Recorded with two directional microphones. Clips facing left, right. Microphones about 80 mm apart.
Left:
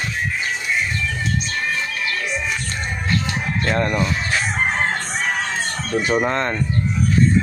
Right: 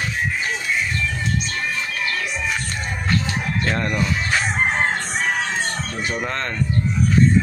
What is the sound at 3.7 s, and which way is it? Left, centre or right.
Speech, centre.